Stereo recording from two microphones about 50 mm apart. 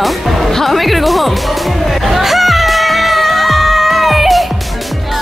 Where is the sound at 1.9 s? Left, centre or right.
Centre.